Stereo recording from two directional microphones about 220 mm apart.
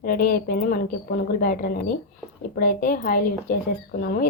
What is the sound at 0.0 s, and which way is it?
A woman's voice, 40° left (ahead or behind).